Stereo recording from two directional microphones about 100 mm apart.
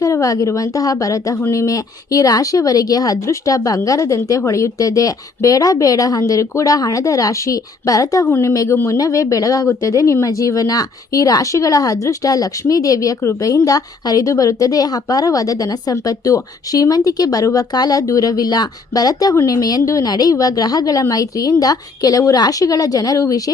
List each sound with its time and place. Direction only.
0.0 s a woman's voice: 35° left (ahead or behind)